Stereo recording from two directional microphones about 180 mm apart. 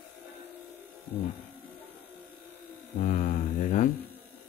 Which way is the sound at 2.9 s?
45° left (ahead or behind).